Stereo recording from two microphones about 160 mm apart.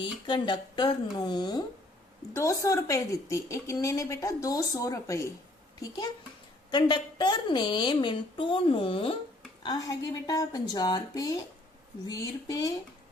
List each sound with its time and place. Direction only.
0.0 s a woman's voice: 30° left (ahead or behind)
6.7 s a woman's voice: 30° left (ahead or behind)
9.6 s a woman's voice: 20° left (ahead or behind)